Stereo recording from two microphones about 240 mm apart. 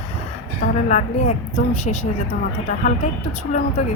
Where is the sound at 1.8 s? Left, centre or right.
Left.